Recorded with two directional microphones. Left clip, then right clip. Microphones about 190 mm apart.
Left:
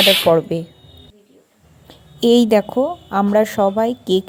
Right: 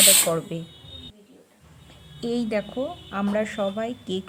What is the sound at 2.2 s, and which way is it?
Speech, 35° left (ahead or behind).